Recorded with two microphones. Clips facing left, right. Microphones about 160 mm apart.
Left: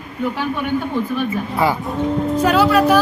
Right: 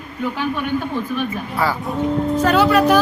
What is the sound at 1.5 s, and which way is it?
A woman's voice, 20° left (ahead or behind).